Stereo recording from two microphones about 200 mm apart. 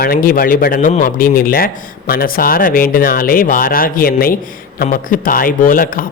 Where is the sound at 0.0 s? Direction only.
45° left (ahead or behind).